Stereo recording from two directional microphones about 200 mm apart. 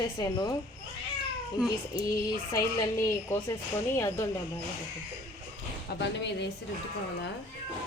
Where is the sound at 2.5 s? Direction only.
15° left (ahead or behind).